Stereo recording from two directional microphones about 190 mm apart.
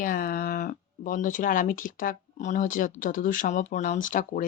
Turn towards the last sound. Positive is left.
turn(degrees=45)  # may be behind; listen again after turning